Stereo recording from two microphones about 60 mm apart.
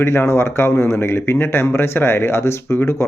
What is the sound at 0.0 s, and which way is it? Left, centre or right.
Speech, left.